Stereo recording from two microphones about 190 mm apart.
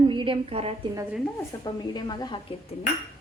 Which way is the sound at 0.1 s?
25° right (ahead or behind).